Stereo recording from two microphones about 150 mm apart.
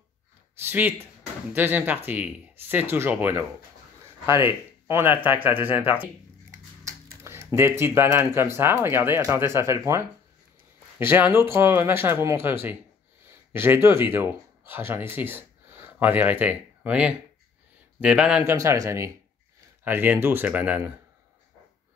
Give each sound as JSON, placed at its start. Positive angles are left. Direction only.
{"t": 0.6, "sound": "speech", "side_deg": -10}
{"t": 7.2, "sound": "speech", "side_deg": -15}
{"t": 18.4, "sound": "a man's voice", "side_deg": -20}